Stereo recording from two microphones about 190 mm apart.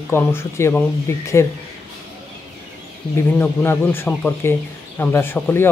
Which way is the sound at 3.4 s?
10° left (ahead or behind).